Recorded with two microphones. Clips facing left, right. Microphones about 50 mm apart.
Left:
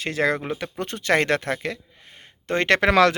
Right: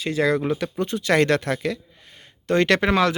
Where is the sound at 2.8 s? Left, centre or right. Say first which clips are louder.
Left 3 dB; left.